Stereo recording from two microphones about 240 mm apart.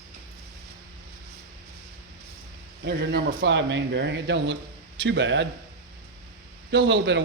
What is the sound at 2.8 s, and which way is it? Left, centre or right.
Speech, right.